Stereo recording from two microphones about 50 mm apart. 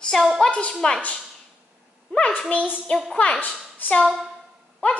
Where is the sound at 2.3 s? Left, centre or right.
Left.